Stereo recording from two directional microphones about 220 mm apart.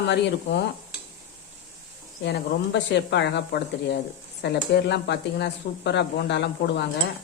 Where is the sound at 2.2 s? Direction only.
50° left (ahead or behind).